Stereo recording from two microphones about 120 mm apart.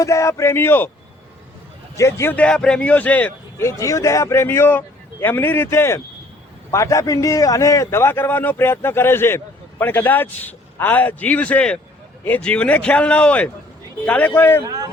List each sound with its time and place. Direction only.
0.0 s a man's voice: 25° left (ahead or behind)
2.0 s a man's voice: 25° left (ahead or behind)
2.3 s a man's voice: 10° left (ahead or behind)